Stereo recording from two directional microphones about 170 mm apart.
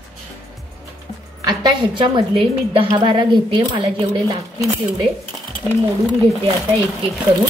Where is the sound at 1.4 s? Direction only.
25° right (ahead or behind).